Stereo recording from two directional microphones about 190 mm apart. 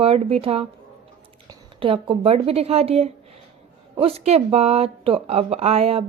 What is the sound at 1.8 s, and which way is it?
A woman's voice, 30° right (ahead or behind).